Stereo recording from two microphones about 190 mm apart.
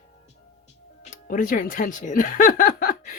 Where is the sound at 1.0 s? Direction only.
45° left (ahead or behind).